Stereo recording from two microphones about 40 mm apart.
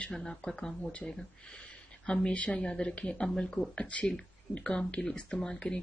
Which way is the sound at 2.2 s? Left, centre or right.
Left.